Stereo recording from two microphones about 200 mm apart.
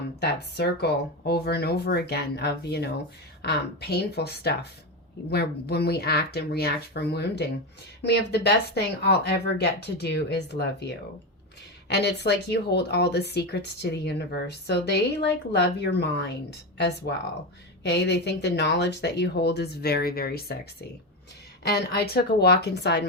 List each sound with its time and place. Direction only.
0.2 s speech: 55° left (ahead or behind)
21.7 s speech: 55° left (ahead or behind)